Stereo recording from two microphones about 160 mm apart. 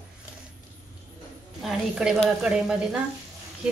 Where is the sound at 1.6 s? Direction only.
5° right (ahead or behind).